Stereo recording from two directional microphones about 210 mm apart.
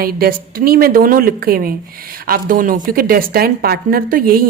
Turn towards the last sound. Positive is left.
turn(degrees=-45)  # may be behind; listen again after turning